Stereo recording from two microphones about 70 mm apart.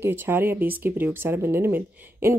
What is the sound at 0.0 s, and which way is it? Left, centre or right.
Speech, right.